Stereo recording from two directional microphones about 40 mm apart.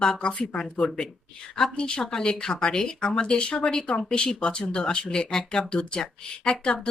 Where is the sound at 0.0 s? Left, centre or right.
Left.